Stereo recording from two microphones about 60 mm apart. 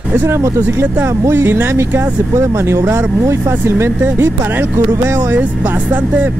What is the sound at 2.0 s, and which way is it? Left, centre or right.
Speech, right.